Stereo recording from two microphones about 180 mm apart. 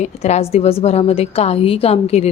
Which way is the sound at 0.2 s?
35° left (ahead or behind).